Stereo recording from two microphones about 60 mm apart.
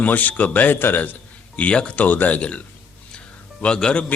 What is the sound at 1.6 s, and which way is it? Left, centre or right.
Speech, centre.